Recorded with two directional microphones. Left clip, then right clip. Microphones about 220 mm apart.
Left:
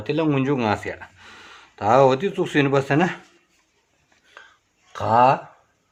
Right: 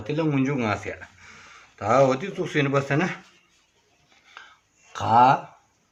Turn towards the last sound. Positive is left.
turn(degrees=30)  # may be behind; listen again after turning